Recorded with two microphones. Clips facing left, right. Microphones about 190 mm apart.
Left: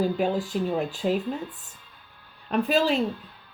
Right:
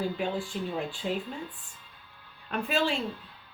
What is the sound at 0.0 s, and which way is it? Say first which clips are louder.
Speech: left 6 dB; 40° left (ahead or behind).